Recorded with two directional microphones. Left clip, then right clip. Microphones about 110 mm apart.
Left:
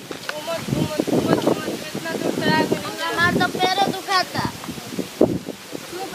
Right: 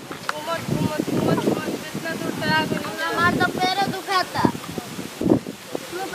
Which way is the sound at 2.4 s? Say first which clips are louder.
Left 1 dB; centre (ahead or behind).